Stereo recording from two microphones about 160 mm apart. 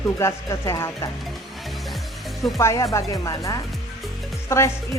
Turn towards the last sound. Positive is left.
turn(degrees=15)  # may be behind; listen again after turning